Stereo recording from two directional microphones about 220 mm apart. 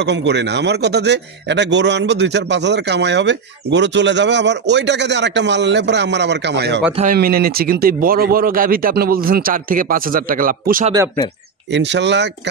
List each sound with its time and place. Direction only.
0.0 s speech: 50° right (ahead or behind)
7.0 s speech: 40° right (ahead or behind)
11.7 s speech: 55° right (ahead or behind)